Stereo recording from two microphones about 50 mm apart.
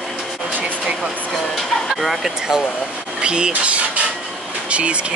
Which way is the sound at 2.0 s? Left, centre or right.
Centre.